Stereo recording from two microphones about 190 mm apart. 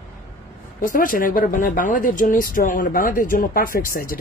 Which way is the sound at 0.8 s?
45° left (ahead or behind).